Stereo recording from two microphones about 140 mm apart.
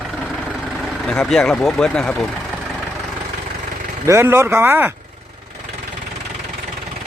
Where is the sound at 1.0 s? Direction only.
5° left (ahead or behind).